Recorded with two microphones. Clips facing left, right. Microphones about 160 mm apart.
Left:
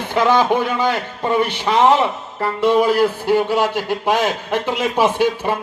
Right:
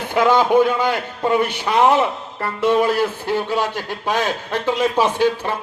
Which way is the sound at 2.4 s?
Centre (ahead or behind).